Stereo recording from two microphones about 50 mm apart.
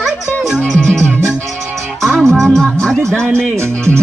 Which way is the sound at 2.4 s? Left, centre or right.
Centre.